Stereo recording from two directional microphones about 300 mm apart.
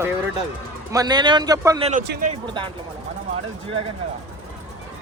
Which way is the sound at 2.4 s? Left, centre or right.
Centre.